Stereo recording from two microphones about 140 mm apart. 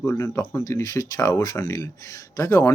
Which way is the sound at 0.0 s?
20° left (ahead or behind).